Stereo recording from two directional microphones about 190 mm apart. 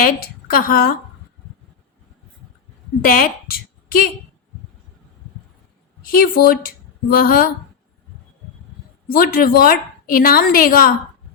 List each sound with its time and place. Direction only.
0.5 s a woman's voice: 50° left (ahead or behind)
3.0 s a woman's voice: 50° left (ahead or behind)
6.0 s speech: 50° left (ahead or behind)
9.0 s a woman's voice: 50° left (ahead or behind)